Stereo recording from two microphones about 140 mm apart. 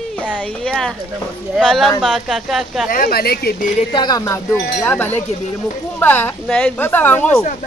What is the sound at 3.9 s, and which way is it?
Speech, 30° left (ahead or behind).